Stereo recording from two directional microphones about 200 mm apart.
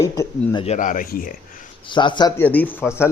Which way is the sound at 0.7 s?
40° left (ahead or behind).